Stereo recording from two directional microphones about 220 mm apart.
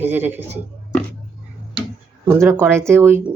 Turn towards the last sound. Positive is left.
turn(degrees=-10)  # may be behind; listen again after turning